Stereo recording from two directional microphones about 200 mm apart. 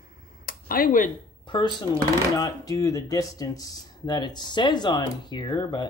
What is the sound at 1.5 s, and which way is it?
Speech, 20° left (ahead or behind).